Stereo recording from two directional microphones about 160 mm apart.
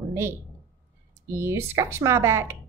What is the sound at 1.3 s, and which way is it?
A woman's voice, 15° right (ahead or behind).